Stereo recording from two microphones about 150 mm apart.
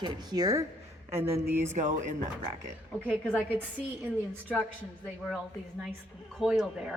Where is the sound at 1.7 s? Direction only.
55° right (ahead or behind).